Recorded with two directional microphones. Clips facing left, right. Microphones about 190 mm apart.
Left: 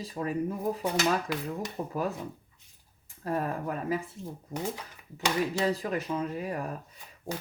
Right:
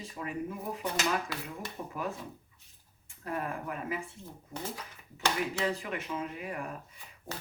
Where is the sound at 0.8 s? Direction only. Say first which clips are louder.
Left 3 dB; 15° left (ahead or behind).